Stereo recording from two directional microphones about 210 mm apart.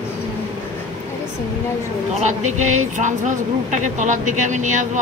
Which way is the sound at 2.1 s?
35° right (ahead or behind).